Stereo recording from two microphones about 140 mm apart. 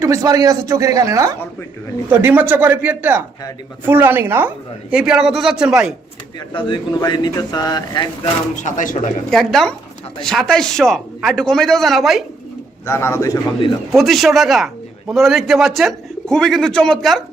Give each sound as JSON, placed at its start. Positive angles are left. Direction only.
{"t": 0.0, "sound": "speech", "side_deg": -25}
{"t": 6.5, "sound": "speech", "side_deg": 35}
{"t": 8.6, "sound": "speech", "side_deg": 65}
{"t": 9.3, "sound": "a man's voice", "side_deg": 5}
{"t": 12.8, "sound": "speech", "side_deg": 20}
{"t": 13.9, "sound": "a man's voice", "side_deg": 0}